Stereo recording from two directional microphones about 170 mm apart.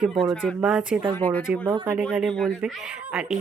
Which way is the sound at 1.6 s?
25° right (ahead or behind).